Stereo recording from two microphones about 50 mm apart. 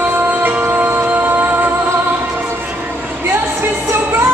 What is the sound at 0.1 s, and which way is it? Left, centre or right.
Music, right.